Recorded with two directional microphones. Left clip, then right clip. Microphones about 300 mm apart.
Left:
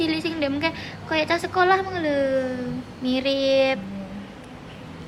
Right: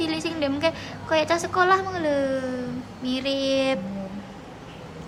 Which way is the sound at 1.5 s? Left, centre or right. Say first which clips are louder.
Left 1 dB; centre.